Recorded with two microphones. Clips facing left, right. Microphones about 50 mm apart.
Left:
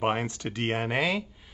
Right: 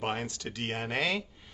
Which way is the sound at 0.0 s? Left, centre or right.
Left.